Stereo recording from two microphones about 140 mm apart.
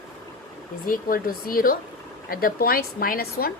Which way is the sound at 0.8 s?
90° left.